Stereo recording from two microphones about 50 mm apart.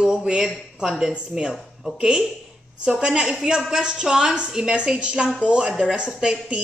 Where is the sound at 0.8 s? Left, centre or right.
Centre.